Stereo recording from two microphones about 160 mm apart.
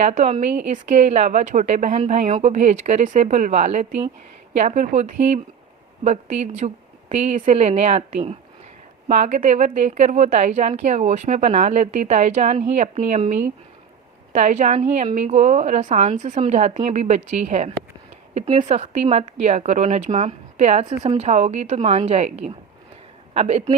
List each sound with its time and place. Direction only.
0.0 s a woman's voice: 45° right (ahead or behind)
18.7 s a woman's voice: 40° right (ahead or behind)